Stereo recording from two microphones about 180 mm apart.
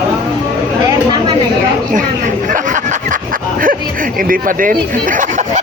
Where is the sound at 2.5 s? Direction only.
45° right (ahead or behind).